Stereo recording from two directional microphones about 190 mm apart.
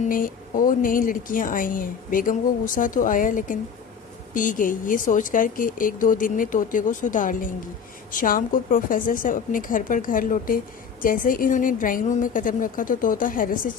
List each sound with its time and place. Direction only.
0.1 s a woman's voice: 45° left (ahead or behind)